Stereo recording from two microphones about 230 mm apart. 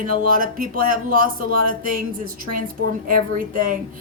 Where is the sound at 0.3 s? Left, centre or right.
Right.